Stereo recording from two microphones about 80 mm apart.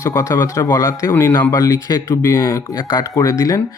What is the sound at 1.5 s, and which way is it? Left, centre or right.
Speech, left.